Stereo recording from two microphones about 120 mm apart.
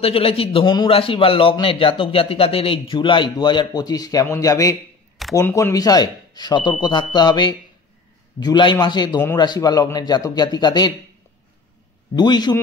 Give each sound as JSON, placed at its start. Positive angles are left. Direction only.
{"t": 0.0, "sound": "a man's voice", "side_deg": 50}
{"t": 12.2, "sound": "speech", "side_deg": 35}